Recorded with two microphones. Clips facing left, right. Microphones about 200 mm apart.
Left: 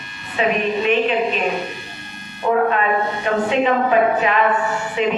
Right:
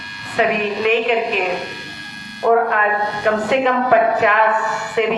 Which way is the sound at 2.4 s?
60° right (ahead or behind).